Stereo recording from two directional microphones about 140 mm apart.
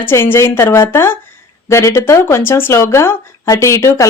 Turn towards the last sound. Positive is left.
turn(degrees=20)  # may be behind; listen again after turning